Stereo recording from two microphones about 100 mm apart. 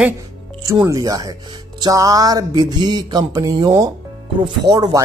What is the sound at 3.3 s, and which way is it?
Speech, 40° right (ahead or behind).